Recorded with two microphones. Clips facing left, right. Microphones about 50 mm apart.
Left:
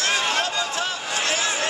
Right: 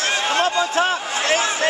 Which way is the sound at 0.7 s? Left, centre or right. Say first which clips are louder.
Right 6 dB; right.